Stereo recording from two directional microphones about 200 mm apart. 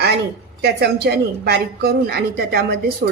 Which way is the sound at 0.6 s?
55° right (ahead or behind).